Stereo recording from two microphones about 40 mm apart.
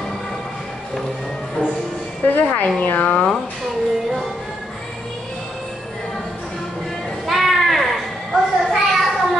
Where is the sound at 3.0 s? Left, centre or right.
Centre.